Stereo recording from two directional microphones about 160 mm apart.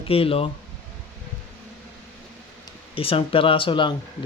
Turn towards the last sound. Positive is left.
turn(degrees=30)  # may be behind; listen again after turning